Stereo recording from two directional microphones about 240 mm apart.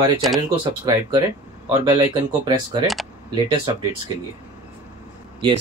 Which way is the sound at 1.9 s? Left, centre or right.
Centre.